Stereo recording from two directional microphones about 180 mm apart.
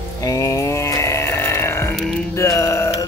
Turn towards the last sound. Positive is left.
turn(degrees=15)  # may be behind; listen again after turning